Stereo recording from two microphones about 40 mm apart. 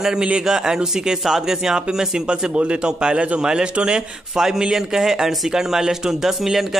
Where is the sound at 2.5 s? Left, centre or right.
Right.